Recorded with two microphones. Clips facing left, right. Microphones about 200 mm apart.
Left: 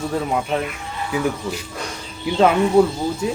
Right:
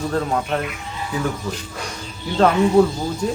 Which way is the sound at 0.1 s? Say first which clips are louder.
Even; 10° left (ahead or behind).